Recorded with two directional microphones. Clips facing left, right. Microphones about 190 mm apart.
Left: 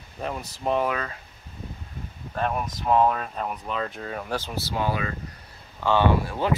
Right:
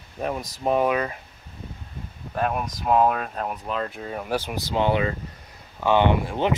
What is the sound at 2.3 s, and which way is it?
Speech, 5° right (ahead or behind).